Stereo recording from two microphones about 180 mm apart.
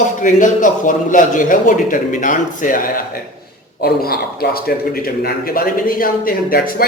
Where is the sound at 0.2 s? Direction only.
45° left (ahead or behind).